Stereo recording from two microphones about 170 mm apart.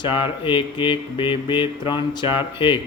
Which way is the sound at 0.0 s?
30° left (ahead or behind).